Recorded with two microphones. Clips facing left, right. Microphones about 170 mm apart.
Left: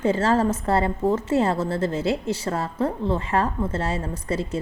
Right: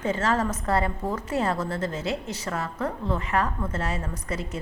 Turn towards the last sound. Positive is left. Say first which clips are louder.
# left 6 dB
turn(degrees=30)  # may be behind; listen again after turning